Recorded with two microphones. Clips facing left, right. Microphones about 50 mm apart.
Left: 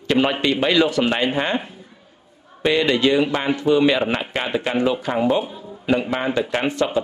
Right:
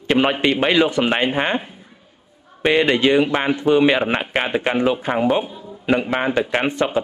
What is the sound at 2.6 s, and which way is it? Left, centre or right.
Speech, right.